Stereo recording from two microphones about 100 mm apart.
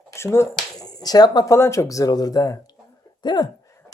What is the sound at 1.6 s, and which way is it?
Speech, 30° left (ahead or behind).